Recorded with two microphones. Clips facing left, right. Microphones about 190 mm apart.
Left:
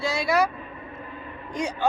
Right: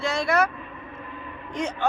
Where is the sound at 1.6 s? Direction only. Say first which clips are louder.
Even; 10° left (ahead or behind).